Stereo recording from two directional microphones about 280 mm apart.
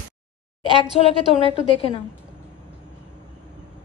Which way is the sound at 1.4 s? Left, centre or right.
Centre.